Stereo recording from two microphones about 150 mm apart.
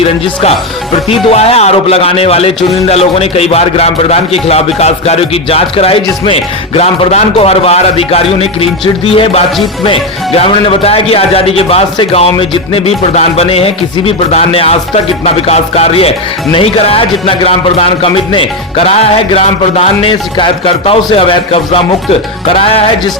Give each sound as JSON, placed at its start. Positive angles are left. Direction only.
{"t": 1.1, "sound": "speech", "side_deg": 40}